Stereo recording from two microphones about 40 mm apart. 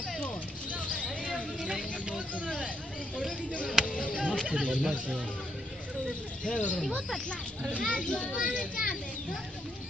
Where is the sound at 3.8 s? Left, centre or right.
Left.